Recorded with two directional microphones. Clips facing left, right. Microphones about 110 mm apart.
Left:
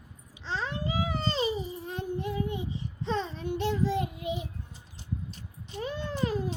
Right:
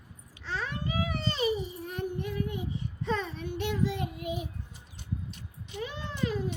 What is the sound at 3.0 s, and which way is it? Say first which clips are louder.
Child singing: left 1 dB; 30° left (ahead or behind).